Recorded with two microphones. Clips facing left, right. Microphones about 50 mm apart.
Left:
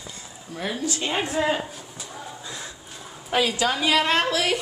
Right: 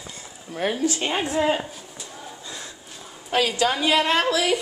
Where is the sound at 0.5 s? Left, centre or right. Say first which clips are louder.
Right 4 dB; right.